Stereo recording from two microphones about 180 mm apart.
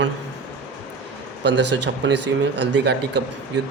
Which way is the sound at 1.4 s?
75° right (ahead or behind).